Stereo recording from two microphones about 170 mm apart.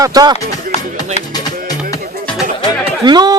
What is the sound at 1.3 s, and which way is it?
Music, 25° left (ahead or behind).